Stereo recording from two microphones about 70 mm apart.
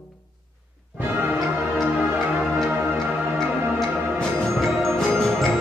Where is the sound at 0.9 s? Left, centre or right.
Right.